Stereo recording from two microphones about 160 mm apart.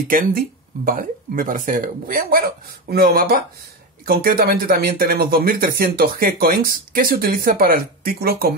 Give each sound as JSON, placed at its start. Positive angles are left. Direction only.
{"t": 0.1, "sound": "speech", "side_deg": -60}